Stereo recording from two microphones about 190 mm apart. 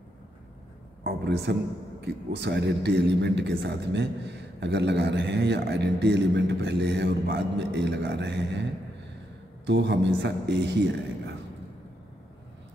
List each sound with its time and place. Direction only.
1.0 s speech: 60° right (ahead or behind)
9.7 s speech: 65° right (ahead or behind)